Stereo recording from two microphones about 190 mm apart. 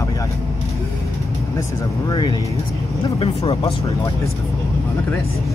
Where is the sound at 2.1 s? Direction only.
20° left (ahead or behind).